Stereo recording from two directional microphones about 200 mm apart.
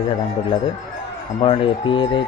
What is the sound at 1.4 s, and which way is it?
Speech, 25° left (ahead or behind).